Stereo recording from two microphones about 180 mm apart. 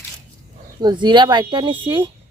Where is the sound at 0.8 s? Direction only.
25° right (ahead or behind).